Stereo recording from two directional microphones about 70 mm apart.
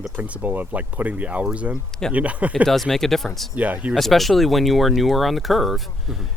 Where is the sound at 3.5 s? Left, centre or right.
Right.